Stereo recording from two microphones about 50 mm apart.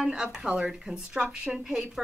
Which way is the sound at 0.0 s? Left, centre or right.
Centre.